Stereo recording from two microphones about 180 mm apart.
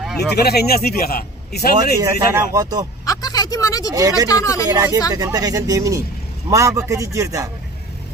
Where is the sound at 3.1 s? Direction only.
20° left (ahead or behind).